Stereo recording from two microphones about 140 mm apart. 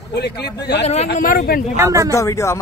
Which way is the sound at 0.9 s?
50° left (ahead or behind).